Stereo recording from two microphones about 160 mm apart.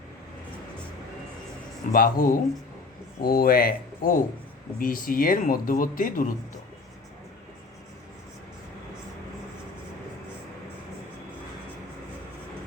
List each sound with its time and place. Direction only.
1.9 s speech: 60° left (ahead or behind)